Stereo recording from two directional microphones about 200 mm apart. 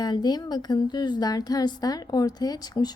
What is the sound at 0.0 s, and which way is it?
A woman's voice, 20° left (ahead or behind).